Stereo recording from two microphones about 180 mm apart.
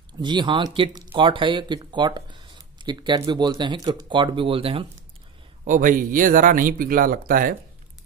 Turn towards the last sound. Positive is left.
turn(degrees=-50)  # may be behind; listen again after turning